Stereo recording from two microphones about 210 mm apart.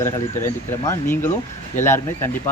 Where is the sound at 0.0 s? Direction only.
10° left (ahead or behind).